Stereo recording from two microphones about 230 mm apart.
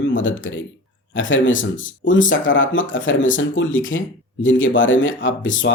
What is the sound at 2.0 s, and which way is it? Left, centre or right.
Speech, left.